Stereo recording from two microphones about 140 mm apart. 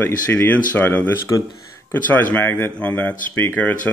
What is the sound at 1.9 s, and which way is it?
Speech, 10° left (ahead or behind).